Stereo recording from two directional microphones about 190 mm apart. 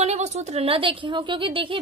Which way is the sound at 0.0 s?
35° right (ahead or behind).